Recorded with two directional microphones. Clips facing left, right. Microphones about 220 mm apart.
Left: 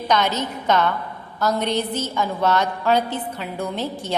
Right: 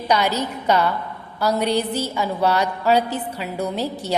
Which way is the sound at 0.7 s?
10° right (ahead or behind).